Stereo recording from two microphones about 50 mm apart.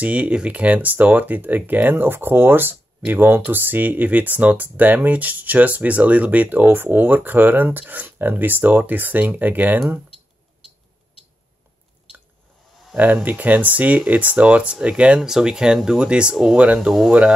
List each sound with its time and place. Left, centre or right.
0.0 s speech: right
12.9 s speech: right
15.1 s speech: centre